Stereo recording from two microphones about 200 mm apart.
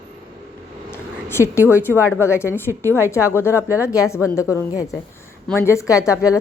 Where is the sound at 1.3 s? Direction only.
10° left (ahead or behind).